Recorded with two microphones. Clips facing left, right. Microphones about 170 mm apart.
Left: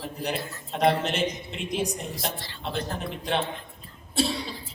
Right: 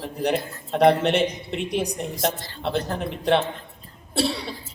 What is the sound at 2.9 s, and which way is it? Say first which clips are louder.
A man's voice: right 9 dB; 65° right (ahead or behind).